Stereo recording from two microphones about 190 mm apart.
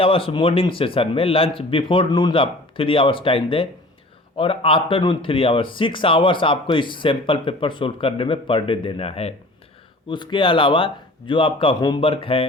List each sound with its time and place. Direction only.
0.0 s speech: 30° left (ahead or behind)